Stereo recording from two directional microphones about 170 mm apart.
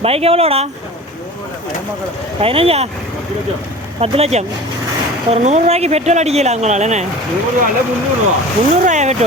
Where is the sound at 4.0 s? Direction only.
40° right (ahead or behind).